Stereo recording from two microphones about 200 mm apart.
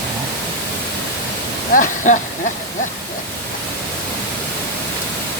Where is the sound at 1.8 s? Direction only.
40° left (ahead or behind).